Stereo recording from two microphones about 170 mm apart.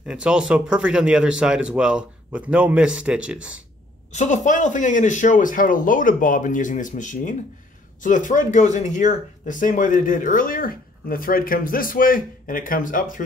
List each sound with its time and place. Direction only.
0.0 s speech: 5° right (ahead or behind)
4.1 s speech: 45° left (ahead or behind)